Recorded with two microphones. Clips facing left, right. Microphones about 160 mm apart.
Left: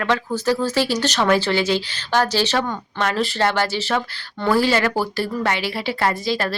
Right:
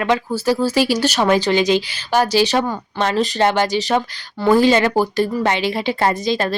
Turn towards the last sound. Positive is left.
turn(degrees=-20)  # may be behind; listen again after turning